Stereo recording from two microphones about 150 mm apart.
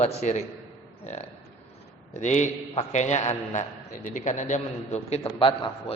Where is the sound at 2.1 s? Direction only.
50° left (ahead or behind).